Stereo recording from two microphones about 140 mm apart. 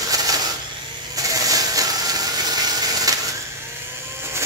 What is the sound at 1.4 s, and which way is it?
Music, 25° right (ahead or behind).